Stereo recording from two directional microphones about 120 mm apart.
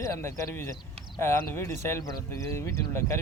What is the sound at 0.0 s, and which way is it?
Speech, 25° left (ahead or behind).